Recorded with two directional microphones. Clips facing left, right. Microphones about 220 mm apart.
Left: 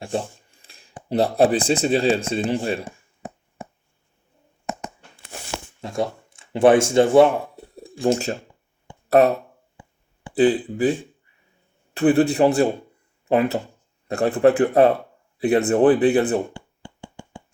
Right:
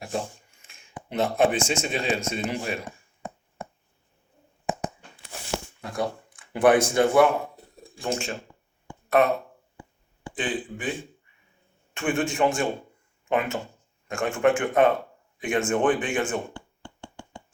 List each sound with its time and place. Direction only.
0.1 s speech: 30° left (ahead or behind)
2.8 s a sound: 5° left (ahead or behind)
5.8 s speech: 25° left (ahead or behind)
10.3 s speech: 35° left (ahead or behind)
11.9 s speech: 35° left (ahead or behind)
17.0 s a sound: 10° left (ahead or behind)